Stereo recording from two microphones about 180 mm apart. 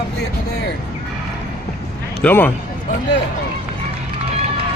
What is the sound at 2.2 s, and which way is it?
Speech, 10° left (ahead or behind).